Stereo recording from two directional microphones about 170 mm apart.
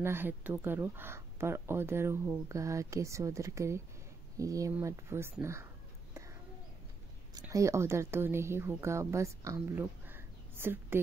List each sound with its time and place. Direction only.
0.0 s speech: 15° right (ahead or behind)
7.3 s speech: 20° right (ahead or behind)